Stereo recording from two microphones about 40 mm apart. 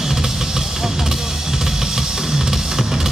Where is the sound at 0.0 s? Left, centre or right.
Centre.